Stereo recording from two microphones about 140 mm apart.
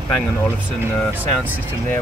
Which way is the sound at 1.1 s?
10° right (ahead or behind).